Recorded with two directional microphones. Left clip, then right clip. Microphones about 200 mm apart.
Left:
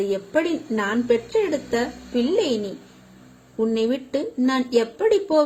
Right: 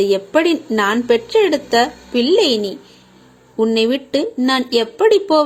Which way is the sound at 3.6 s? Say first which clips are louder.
Right 7 dB; 10° right (ahead or behind).